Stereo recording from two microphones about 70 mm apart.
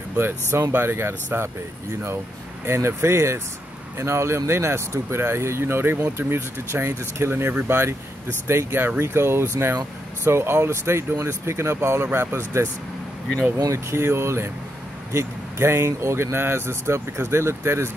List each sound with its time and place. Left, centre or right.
0.2 s speech: right
2.6 s speech: right
13.7 s speech: right